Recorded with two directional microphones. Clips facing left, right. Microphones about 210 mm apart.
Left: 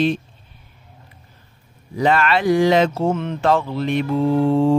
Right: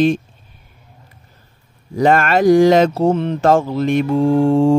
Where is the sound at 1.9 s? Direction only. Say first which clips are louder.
Right 4 dB; 45° right (ahead or behind).